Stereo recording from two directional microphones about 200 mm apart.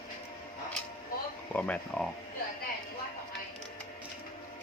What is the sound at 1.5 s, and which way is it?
Speech, 5° left (ahead or behind).